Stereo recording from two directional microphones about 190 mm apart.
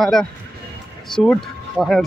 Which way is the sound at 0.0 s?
Centre (ahead or behind).